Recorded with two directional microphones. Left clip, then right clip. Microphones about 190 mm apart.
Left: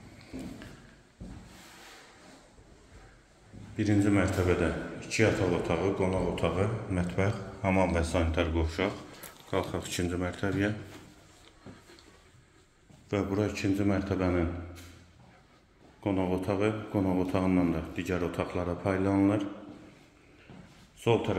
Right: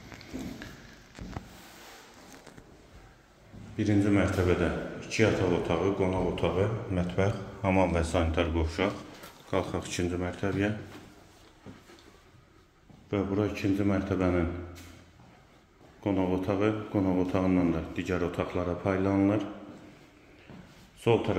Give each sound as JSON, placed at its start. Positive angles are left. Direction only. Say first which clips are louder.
{"t": 3.7, "sound": "a man's voice", "louder": "right 1 dB", "side_deg": 5}
{"t": 13.1, "sound": "a man's voice", "louder": "right 1 dB", "side_deg": 10}
{"t": 16.0, "sound": "a man's voice", "louder": "right 1 dB", "side_deg": 5}
{"t": 21.0, "sound": "speech", "louder": "right 1 dB", "side_deg": 0}